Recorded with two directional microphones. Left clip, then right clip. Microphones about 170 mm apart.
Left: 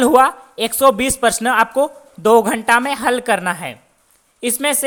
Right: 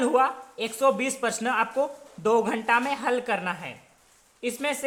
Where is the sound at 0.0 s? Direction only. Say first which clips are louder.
Left 10 dB; 45° left (ahead or behind).